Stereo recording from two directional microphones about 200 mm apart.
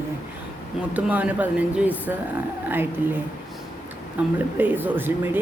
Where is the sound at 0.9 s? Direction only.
5° right (ahead or behind).